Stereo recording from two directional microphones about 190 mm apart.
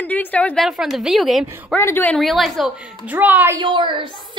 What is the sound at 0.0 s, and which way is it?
A woman's voice, 10° left (ahead or behind).